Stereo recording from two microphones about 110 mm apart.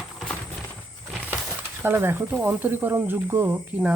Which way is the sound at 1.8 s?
20° right (ahead or behind).